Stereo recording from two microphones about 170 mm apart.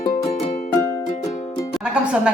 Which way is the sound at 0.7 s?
15° left (ahead or behind).